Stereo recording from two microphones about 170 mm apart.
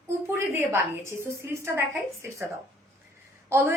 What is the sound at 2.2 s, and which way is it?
Speech, 15° right (ahead or behind).